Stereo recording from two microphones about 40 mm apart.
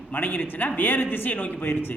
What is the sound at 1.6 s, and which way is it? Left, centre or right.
Speech, left.